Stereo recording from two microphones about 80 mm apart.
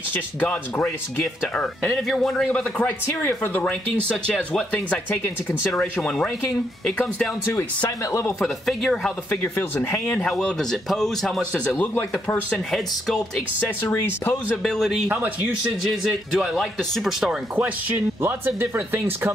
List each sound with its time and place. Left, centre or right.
0.1 s speech: left
4.6 s speech: centre
8.4 s speech: centre
9.4 s speech: left; by 11.6 s centre
11.6 s speech: centre
14.6 s speech: centre
15.0 s speech: right
15.9 s speech: centre
18.2 s speech: right